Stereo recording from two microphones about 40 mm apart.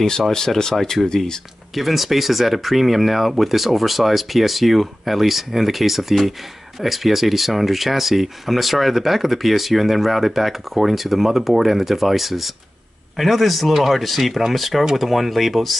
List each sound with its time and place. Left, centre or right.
0.3 s speech: centre
1.8 s speech: centre